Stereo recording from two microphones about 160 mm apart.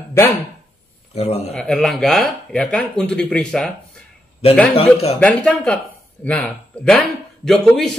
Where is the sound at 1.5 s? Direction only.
5° left (ahead or behind).